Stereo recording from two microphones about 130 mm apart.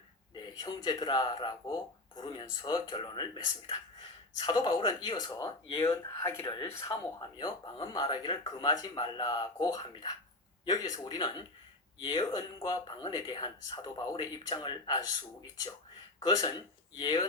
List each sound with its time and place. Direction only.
0.3 s speech: 35° left (ahead or behind)
5.8 s speech: 20° left (ahead or behind)
7.2 s speech: 35° left (ahead or behind)
16.2 s speech: 30° left (ahead or behind)